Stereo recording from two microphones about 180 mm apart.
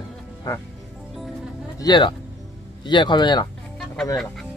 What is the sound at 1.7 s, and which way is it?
Speech, 25° left (ahead or behind).